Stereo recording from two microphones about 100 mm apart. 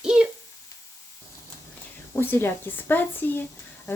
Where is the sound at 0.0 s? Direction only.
10° right (ahead or behind).